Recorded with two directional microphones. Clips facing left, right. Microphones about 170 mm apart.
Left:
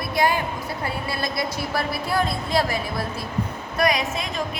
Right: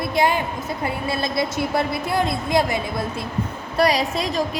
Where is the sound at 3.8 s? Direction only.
30° right (ahead or behind).